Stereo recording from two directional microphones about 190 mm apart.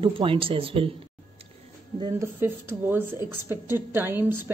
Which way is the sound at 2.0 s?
20° right (ahead or behind).